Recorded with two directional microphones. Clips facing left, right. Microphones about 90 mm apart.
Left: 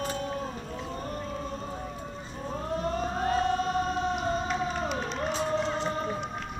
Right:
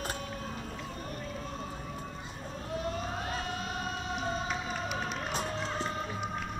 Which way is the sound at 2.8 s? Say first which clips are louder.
Left 6 dB; 40° left (ahead or behind).